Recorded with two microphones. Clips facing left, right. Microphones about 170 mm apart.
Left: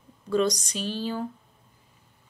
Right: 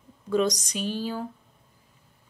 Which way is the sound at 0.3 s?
15° right (ahead or behind).